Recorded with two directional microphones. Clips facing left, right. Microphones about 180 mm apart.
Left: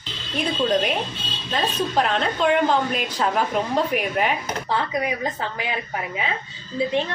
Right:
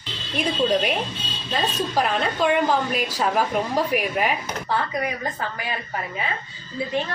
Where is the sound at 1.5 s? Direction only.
5° right (ahead or behind).